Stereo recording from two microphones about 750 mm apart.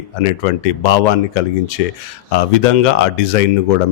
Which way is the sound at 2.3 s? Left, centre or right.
Left.